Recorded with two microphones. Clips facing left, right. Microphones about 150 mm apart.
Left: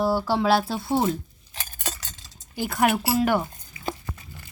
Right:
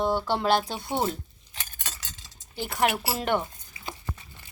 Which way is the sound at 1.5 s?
40° left (ahead or behind).